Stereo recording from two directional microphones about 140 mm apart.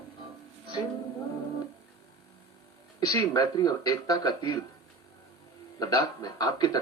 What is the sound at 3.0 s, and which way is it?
Speech, 25° left (ahead or behind).